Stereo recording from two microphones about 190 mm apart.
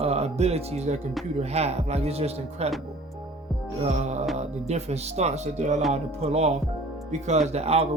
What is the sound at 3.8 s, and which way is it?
Speech, 35° right (ahead or behind).